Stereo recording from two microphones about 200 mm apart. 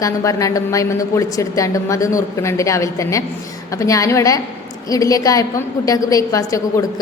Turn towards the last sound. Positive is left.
turn(degrees=15)  # may be behind; listen again after turning